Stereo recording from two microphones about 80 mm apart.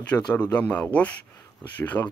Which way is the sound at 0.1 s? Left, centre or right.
Centre.